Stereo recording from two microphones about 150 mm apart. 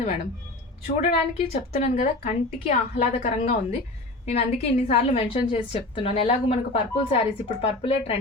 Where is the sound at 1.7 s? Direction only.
45° left (ahead or behind).